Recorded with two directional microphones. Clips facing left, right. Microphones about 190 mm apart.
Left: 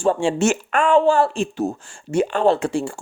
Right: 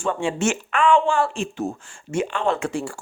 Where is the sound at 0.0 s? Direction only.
35° left (ahead or behind).